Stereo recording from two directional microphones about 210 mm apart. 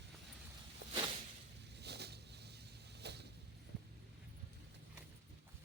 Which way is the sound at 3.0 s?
55° right (ahead or behind).